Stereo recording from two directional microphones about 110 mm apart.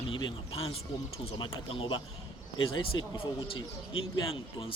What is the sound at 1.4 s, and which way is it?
Speech, 50° left (ahead or behind).